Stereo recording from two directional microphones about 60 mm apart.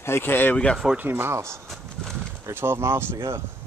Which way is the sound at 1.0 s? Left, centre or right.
Right.